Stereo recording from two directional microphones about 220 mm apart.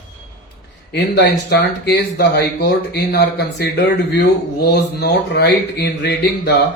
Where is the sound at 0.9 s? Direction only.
50° left (ahead or behind).